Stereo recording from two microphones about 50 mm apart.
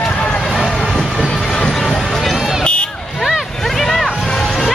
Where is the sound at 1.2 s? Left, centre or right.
Centre.